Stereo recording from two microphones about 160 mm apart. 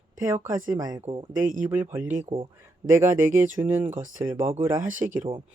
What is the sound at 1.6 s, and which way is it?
Speech, 10° right (ahead or behind).